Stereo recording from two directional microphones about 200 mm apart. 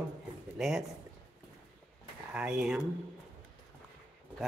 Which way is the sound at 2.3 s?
5° right (ahead or behind).